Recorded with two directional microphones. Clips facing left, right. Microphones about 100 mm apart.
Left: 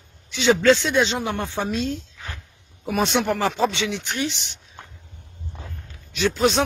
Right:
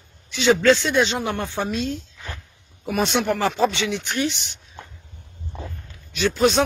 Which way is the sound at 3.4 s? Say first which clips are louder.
Right 1 dB; 15° left (ahead or behind).